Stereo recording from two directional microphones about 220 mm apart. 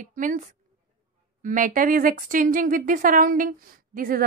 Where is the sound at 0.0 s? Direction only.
35° right (ahead or behind).